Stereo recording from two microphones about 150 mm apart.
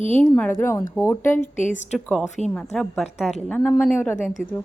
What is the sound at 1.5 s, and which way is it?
Speech, 55° left (ahead or behind).